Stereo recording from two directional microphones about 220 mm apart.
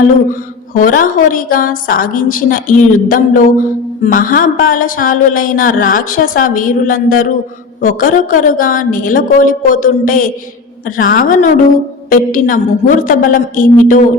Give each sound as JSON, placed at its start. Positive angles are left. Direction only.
{"t": 0.3, "sound": "a woman's voice", "side_deg": 40}